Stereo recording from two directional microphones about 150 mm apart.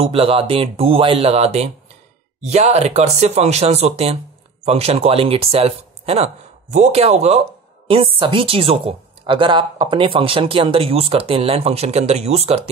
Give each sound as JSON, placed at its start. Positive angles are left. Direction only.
{"t": 0.0, "sound": "a woman's voice", "side_deg": -40}